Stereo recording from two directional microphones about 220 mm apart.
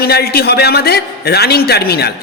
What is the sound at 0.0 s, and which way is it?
A man's voice, 45° left (ahead or behind).